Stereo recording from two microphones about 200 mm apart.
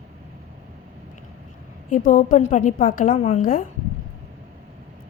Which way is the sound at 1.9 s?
40° left (ahead or behind).